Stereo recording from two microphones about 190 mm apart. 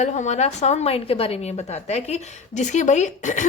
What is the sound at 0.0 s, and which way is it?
A woman's voice, 40° left (ahead or behind).